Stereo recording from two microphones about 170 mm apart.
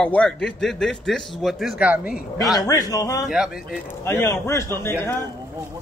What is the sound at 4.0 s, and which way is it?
Speech, 15° left (ahead or behind).